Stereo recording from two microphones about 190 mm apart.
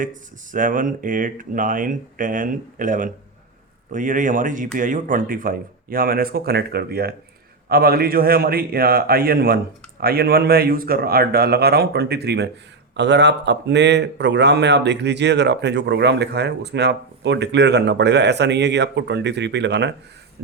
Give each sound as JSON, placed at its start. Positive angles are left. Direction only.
{"t": 0.0, "sound": "a man's voice", "side_deg": -45}